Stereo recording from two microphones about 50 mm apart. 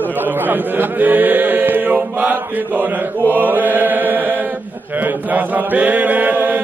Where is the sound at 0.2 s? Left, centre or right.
Right.